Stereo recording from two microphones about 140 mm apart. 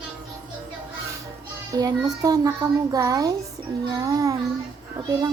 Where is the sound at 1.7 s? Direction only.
25° right (ahead or behind).